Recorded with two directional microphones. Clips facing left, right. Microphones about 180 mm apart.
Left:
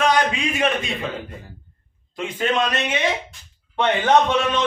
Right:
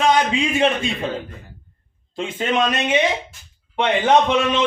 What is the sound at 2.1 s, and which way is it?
Speech, 25° right (ahead or behind).